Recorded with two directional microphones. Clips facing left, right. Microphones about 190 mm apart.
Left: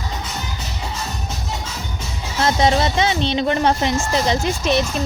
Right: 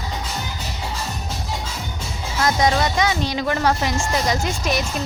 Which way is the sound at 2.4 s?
25° left (ahead or behind).